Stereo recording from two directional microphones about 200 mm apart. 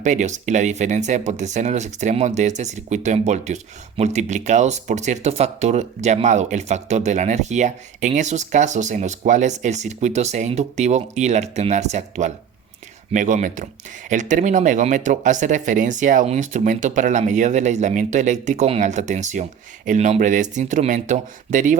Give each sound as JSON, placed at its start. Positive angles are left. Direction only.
{"t": 0.0, "sound": "speech", "side_deg": -35}